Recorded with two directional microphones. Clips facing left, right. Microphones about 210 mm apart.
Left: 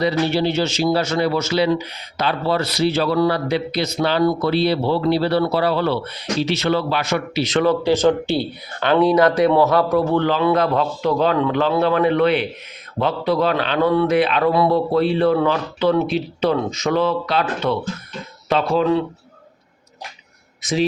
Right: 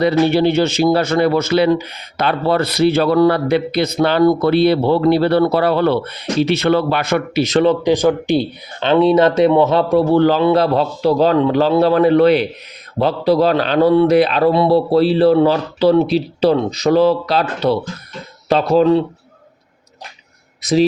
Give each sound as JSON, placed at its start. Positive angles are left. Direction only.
{"t": 0.0, "sound": "speech", "side_deg": -55}
{"t": 7.6, "sound": "speech", "side_deg": -20}
{"t": 20.6, "sound": "a sound", "side_deg": -35}